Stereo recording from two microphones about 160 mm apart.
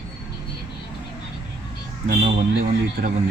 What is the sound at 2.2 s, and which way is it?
Speech, 55° right (ahead or behind).